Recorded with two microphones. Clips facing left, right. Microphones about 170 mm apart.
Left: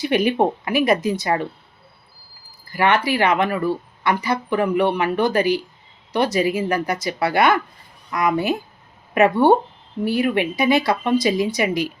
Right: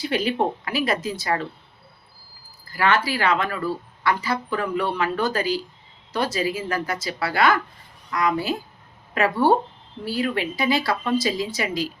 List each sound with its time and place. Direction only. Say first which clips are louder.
0.0 s speech: left 5 dB; 20° left (ahead or behind)
2.7 s speech: left 3 dB; 20° left (ahead or behind)